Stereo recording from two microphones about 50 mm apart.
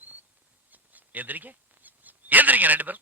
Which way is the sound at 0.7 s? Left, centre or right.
Right.